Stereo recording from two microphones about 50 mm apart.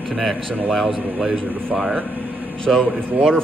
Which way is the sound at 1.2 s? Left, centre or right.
Right.